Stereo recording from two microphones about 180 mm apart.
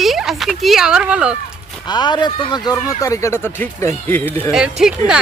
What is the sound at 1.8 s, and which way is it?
Speech, 25° left (ahead or behind).